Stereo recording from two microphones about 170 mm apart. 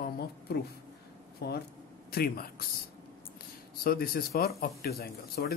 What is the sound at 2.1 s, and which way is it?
Speech, 60° left (ahead or behind).